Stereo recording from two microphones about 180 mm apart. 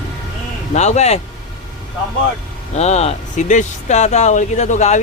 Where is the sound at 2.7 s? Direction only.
35° left (ahead or behind).